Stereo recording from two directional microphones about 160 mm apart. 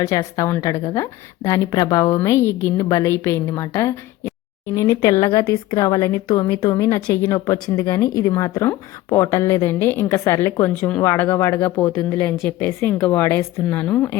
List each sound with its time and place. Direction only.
0.0 s a woman's voice: 20° left (ahead or behind)